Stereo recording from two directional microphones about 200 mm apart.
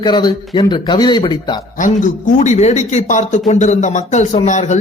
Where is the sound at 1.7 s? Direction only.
40° left (ahead or behind).